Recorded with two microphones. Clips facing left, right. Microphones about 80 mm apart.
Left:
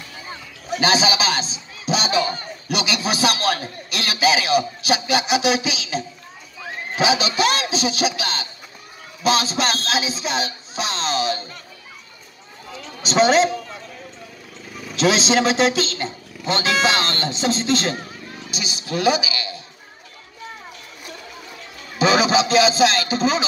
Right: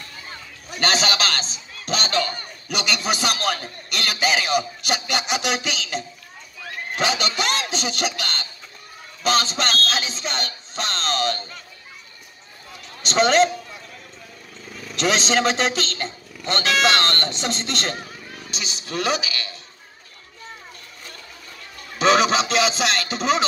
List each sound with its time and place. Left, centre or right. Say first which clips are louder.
0.2 s a sound: left 3 dB; centre
2.7 s a man's voice: left 1 dB; centre
12.9 s a man's voice: left 2 dB; centre
14.8 s a man's voice: left 3 dB; centre
21.9 s a man's voice: left 1 dB; centre